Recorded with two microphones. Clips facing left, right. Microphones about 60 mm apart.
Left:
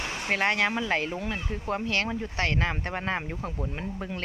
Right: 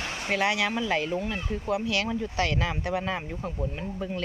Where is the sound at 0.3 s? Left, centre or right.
Left.